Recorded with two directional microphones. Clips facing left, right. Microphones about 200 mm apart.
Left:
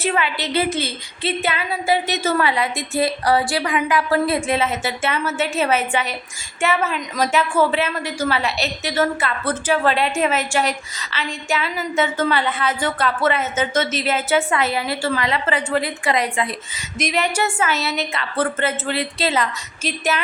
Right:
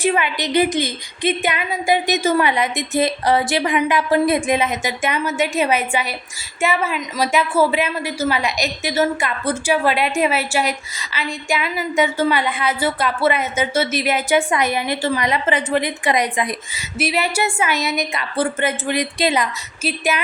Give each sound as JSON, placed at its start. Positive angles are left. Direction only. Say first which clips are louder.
{"t": 0.0, "sound": "a woman's voice", "louder": "right 3 dB", "side_deg": -15}